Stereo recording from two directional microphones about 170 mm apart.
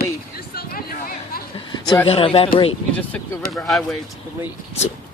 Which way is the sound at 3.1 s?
5° left (ahead or behind).